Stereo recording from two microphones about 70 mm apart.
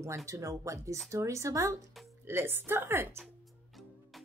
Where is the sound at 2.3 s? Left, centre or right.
Right.